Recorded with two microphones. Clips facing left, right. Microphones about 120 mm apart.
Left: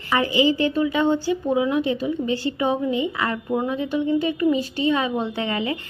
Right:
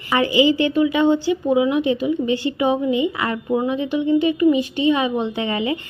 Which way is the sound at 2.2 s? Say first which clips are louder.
Right 3 dB; 35° left (ahead or behind).